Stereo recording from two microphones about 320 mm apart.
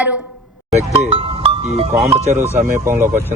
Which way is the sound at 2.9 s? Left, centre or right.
Centre.